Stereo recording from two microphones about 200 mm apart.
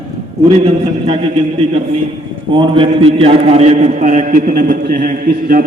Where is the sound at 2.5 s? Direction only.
25° right (ahead or behind).